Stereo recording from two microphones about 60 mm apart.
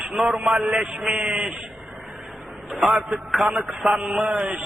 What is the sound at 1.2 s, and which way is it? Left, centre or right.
Speech, right.